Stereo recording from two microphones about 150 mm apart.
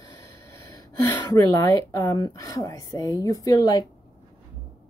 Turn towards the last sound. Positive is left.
turn(degrees=25)  # may be behind; listen again after turning